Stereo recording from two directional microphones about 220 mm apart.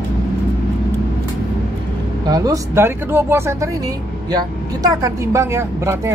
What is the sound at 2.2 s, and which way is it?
Speech, 15° right (ahead or behind).